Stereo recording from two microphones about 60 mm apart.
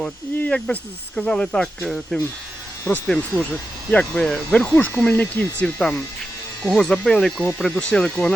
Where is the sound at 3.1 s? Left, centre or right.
Left.